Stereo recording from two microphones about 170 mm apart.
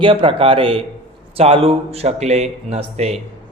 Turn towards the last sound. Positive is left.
turn(degrees=-40)  # may be behind; listen again after turning